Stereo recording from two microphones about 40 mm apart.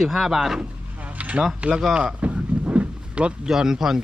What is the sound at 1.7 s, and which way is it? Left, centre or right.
Speech, centre.